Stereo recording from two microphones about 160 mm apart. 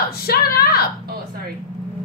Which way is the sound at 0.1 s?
70° left (ahead or behind).